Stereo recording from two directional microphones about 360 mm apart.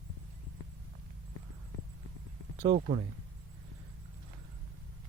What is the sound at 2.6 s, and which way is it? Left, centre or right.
Speech, centre.